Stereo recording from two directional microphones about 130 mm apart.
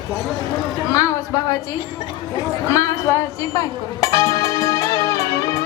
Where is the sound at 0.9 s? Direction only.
25° left (ahead or behind).